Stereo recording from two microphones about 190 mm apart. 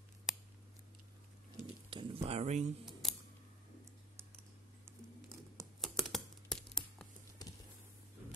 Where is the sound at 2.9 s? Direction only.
Centre (ahead or behind).